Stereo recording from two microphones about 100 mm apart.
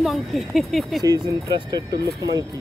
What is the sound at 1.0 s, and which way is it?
Speech, 40° right (ahead or behind).